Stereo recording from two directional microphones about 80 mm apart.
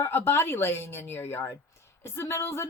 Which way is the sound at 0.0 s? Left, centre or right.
Left.